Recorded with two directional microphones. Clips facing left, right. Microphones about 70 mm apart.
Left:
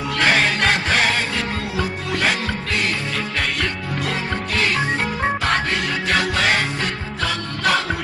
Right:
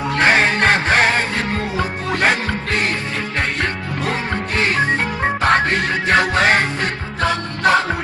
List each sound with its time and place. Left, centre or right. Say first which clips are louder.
0.1 s music: right 3 dB; right